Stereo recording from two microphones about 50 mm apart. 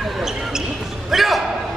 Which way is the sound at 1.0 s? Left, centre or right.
Centre.